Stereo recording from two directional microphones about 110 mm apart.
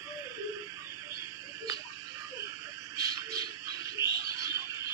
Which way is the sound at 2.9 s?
30° right (ahead or behind).